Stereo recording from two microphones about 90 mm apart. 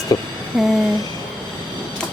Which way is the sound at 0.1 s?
45° left (ahead or behind).